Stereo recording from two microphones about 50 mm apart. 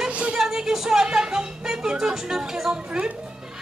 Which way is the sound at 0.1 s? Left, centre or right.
Right.